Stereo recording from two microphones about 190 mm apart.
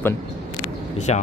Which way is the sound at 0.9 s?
35° left (ahead or behind).